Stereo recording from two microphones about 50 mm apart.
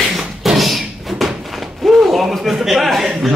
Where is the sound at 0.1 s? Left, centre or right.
Centre.